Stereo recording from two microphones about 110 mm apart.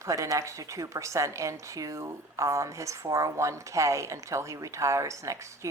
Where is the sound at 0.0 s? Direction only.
30° right (ahead or behind).